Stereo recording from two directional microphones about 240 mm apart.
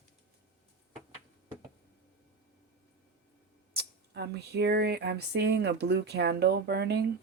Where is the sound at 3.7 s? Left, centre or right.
Right.